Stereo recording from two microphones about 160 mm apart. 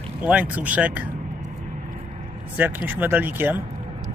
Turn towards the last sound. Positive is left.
turn(degrees=-10)  # may be behind; listen again after turning